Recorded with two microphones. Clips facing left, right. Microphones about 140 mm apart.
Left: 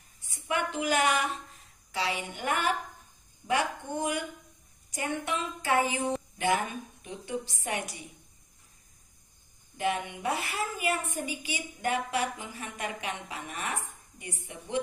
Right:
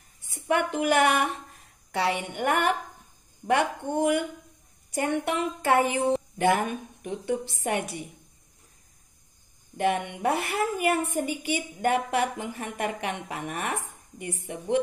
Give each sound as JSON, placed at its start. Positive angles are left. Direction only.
{"t": 0.3, "sound": "a woman's voice", "side_deg": -60}
{"t": 9.8, "sound": "a woman's voice", "side_deg": -60}